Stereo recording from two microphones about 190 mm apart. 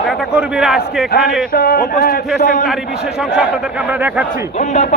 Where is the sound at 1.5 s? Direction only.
50° left (ahead or behind).